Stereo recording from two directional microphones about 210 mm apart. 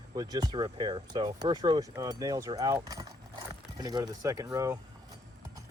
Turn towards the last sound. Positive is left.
turn(degrees=-15)  # may be behind; listen again after turning